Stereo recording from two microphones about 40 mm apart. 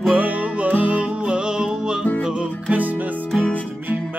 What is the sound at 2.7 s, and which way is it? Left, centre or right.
Music, right.